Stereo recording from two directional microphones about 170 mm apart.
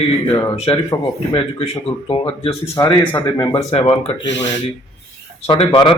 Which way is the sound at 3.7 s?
35° left (ahead or behind).